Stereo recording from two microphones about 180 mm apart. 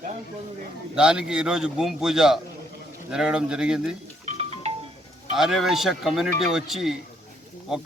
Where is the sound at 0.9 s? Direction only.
5° right (ahead or behind).